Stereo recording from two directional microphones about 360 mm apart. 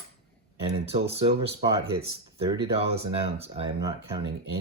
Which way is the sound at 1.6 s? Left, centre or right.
Centre.